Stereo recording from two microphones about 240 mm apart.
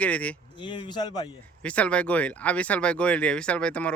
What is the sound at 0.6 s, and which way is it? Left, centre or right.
Speech, centre.